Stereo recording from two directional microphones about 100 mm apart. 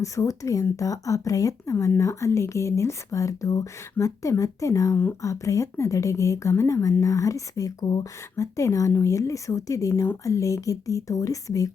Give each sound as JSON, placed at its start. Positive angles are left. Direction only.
{"t": 0.0, "sound": "speech", "side_deg": 30}